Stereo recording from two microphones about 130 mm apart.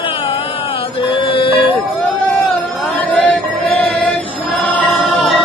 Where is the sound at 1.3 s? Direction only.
45° left (ahead or behind).